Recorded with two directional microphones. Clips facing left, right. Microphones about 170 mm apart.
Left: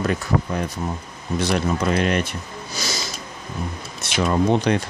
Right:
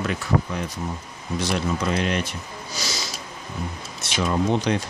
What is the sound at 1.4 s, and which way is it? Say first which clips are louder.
Speech: left 3 dB; 55° left (ahead or behind).